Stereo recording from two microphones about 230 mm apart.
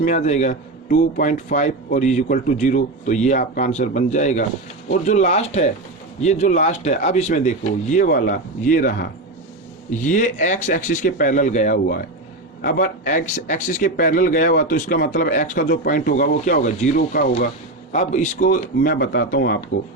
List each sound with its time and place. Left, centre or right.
0.0 s speech: left